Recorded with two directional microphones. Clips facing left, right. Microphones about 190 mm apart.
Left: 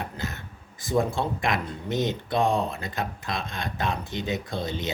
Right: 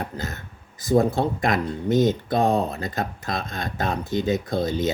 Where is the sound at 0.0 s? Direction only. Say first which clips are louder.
Right 3 dB; 40° right (ahead or behind).